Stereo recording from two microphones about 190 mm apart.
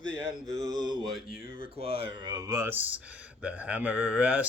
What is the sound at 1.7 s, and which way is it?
Speech, 30° right (ahead or behind).